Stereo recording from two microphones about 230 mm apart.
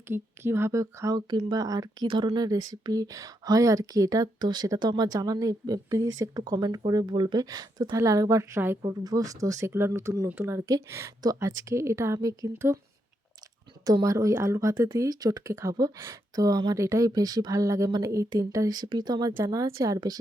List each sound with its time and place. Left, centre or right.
0.1 s speech: centre
13.8 s speech: centre